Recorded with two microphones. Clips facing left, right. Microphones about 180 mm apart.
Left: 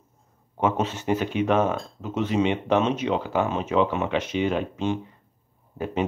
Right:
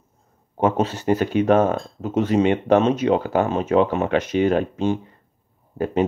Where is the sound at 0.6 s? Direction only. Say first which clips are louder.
Right 4 dB; 40° right (ahead or behind).